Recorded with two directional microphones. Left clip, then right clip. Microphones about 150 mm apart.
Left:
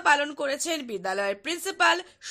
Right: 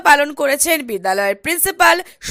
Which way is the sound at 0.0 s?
40° right (ahead or behind).